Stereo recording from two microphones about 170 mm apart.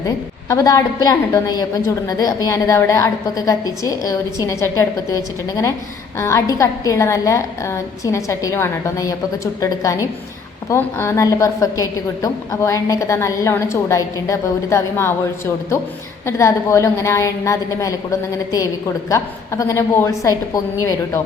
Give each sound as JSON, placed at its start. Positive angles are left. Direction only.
{"t": 0.0, "sound": "a woman's voice", "side_deg": 20}